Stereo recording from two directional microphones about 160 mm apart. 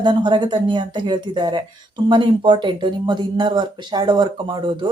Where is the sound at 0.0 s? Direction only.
30° right (ahead or behind).